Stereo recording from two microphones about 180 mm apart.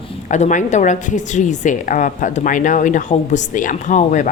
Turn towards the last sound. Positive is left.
turn(degrees=45)  # may be behind; listen again after turning